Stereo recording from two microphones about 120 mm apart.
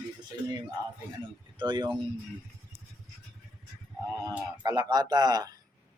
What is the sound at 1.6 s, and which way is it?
Speech, 40° right (ahead or behind).